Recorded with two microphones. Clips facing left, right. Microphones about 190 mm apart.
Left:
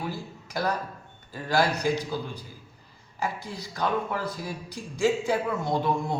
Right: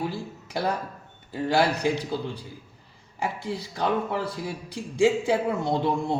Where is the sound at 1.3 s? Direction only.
25° right (ahead or behind).